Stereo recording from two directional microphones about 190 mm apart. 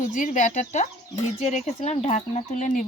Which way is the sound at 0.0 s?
40° left (ahead or behind).